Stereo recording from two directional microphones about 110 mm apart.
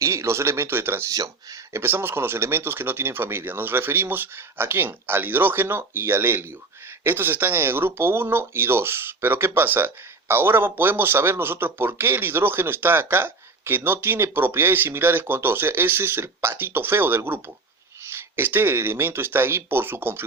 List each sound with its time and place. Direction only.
0.0 s speech: 25° right (ahead or behind)
1.1 s speech: 30° right (ahead or behind)